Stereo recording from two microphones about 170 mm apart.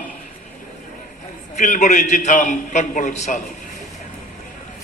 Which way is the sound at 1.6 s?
45° left (ahead or behind).